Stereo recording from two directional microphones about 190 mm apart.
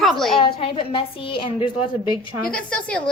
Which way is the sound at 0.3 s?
30° left (ahead or behind).